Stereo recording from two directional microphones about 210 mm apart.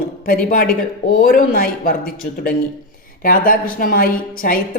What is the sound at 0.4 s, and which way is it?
Speech, 45° left (ahead or behind).